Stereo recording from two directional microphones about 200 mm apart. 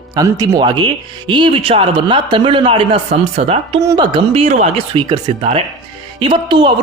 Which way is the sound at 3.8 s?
20° right (ahead or behind).